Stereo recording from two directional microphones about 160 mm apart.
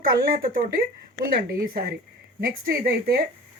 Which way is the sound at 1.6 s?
65° right (ahead or behind).